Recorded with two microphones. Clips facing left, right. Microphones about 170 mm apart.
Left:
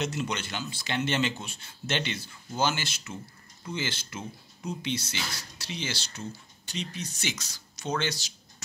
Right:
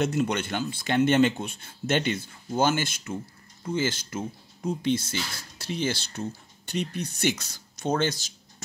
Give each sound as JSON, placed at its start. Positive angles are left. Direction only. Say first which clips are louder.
{"t": 0.0, "sound": "speech", "louder": "right 6 dB", "side_deg": -55}